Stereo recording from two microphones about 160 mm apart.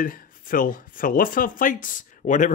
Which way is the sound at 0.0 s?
60° left (ahead or behind).